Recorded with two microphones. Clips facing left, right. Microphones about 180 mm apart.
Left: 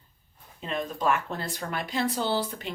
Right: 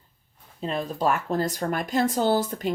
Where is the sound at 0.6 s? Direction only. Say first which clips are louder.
Right 3 dB; 35° right (ahead or behind).